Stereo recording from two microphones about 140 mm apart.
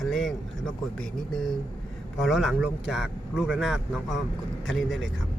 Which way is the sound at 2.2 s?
Centre (ahead or behind).